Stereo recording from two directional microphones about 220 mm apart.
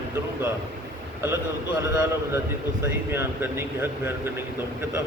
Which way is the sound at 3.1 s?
10° right (ahead or behind).